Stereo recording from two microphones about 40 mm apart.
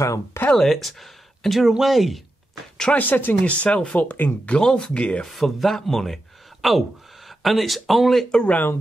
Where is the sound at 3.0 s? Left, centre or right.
Left.